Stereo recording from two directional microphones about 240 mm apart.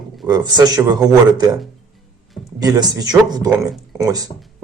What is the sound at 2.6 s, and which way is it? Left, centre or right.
Speech, centre.